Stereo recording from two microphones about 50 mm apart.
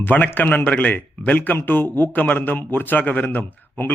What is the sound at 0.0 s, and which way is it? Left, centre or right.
A man's voice, left.